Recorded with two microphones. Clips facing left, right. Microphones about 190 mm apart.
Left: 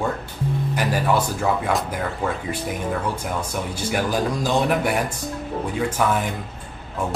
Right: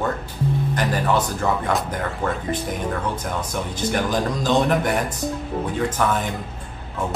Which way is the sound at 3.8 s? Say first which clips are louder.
Right 1 dB; 10° left (ahead or behind).